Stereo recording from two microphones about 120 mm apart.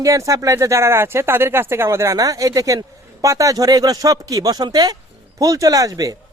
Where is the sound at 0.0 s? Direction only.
25° right (ahead or behind).